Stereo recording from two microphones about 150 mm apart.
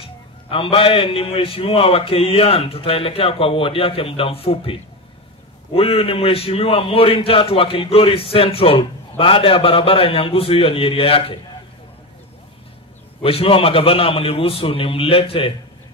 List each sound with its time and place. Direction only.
0.5 s a man's voice: 35° left (ahead or behind)
5.8 s a man's voice: 40° left (ahead or behind)
13.2 s a man's voice: 40° left (ahead or behind)